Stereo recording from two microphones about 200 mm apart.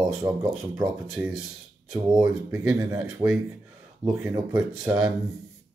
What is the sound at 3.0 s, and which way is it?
Speech, 5° right (ahead or behind).